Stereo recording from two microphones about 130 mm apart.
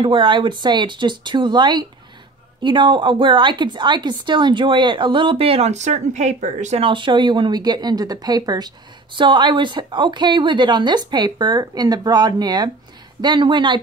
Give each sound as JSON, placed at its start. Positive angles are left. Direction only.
{"t": 0.0, "sound": "speech", "side_deg": -40}
{"t": 6.8, "sound": "speech", "side_deg": -40}